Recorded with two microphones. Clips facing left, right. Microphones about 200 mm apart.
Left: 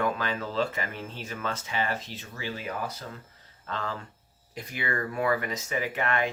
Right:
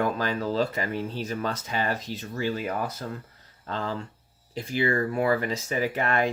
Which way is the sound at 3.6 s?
35° right (ahead or behind).